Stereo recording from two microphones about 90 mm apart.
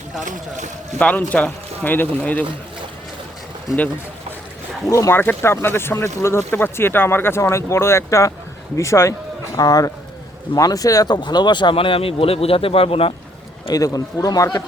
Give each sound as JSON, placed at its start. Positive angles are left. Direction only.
{"t": 0.9, "sound": "speech", "side_deg": 15}
{"t": 4.9, "sound": "speech", "side_deg": 35}
{"t": 5.1, "sound": "speech", "side_deg": 20}
{"t": 13.7, "sound": "a man's voice", "side_deg": 40}